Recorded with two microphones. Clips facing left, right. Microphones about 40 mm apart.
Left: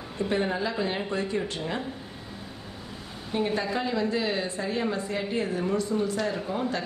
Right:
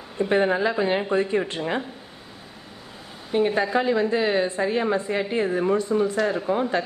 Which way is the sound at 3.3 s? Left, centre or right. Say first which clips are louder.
Right 6 dB; centre.